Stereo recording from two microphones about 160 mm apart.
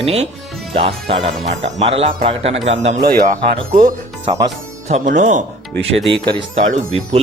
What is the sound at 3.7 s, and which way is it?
Speech, 55° right (ahead or behind).